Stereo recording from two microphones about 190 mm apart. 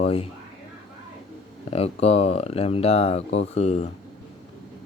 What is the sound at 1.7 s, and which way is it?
Speech, 30° left (ahead or behind).